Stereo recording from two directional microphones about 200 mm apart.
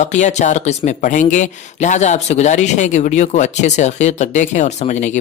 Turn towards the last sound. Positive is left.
turn(degrees=35)  # may be behind; listen again after turning